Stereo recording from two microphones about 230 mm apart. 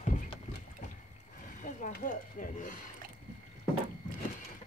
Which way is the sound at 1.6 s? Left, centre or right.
Left.